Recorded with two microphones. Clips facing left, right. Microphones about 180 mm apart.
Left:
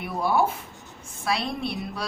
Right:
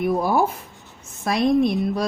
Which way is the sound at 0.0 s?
40° right (ahead or behind).